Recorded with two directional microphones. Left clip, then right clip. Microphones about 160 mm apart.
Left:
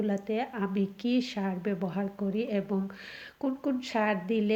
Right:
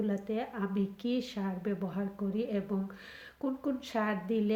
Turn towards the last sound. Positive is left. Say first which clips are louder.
# left 4 dB
turn(degrees=35)  # may be behind; listen again after turning